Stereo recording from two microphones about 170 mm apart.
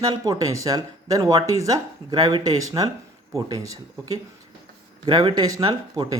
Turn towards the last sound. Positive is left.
turn(degrees=-25)  # may be behind; listen again after turning